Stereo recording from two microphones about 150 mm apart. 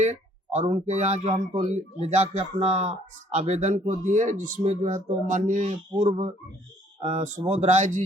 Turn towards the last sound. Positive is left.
turn(degrees=-55)  # may be behind; listen again after turning